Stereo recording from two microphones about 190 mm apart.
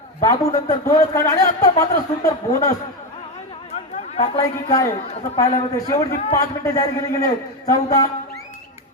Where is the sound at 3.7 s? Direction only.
30° left (ahead or behind).